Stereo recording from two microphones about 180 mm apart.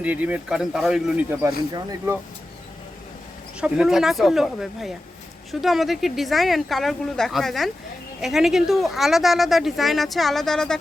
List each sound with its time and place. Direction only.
0.0 s speech: 10° right (ahead or behind)
3.6 s speech: 5° right (ahead or behind)